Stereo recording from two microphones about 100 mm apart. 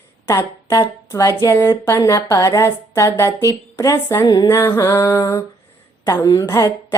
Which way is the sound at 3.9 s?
30° left (ahead or behind).